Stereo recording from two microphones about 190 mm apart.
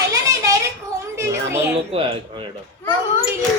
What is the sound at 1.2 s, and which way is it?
Children playing, 15° right (ahead or behind).